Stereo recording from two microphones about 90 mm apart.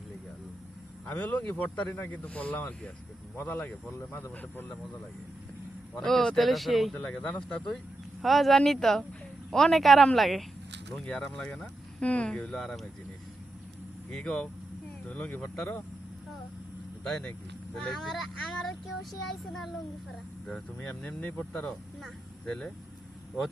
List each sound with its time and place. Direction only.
1.0 s speech: 15° left (ahead or behind)
3.9 s speech: 30° left (ahead or behind)
5.9 s speech: 5° left (ahead or behind)
6.9 s speech: 10° left (ahead or behind)
14.1 s speech: 5° left (ahead or behind)
15.4 s speech: 5° left (ahead or behind)
17.0 s speech: 10° left (ahead or behind)
20.5 s speech: 10° left (ahead or behind)